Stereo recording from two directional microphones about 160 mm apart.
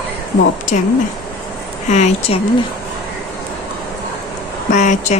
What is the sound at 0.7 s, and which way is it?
Speech, 55° left (ahead or behind).